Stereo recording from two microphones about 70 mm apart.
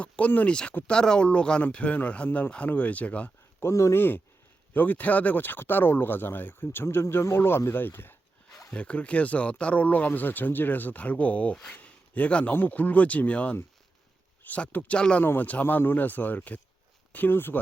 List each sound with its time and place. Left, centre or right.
0.0 s speech: left
3.6 s speech: left
4.7 s speech: left
8.7 s speech: centre
11.5 s speech: centre
11.8 s a sound: left
12.5 s speech: left
15.2 s speech: left